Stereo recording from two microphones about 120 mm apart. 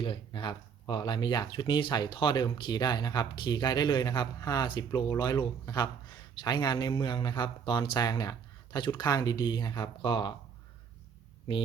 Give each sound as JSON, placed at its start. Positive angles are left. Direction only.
{"t": 0.0, "sound": "speech", "side_deg": 45}